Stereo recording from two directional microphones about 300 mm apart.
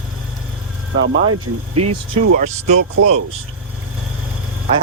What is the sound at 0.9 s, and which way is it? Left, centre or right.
Speech, right.